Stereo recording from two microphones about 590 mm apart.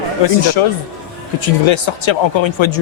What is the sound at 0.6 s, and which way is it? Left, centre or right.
A man's voice, left.